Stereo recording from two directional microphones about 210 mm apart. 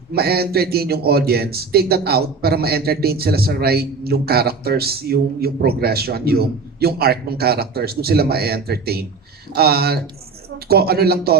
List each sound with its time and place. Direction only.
0.1 s a man's voice: 50° right (ahead or behind)